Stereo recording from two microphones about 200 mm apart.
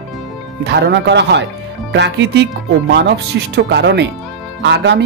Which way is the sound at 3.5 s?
60° right (ahead or behind).